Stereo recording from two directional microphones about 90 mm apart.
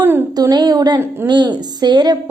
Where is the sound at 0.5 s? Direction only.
45° right (ahead or behind).